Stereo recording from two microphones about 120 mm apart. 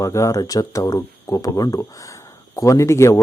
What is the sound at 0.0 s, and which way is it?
A man's voice, 25° left (ahead or behind).